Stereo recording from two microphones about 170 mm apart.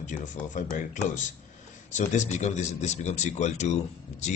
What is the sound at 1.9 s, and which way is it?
Speech, 45° left (ahead or behind).